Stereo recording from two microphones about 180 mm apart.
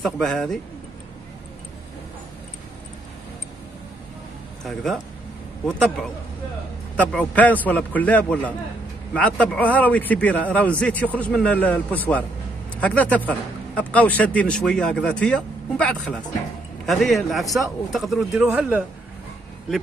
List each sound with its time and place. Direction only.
0.0 s speech: 5° left (ahead or behind)
5.7 s speech: 5° left (ahead or behind)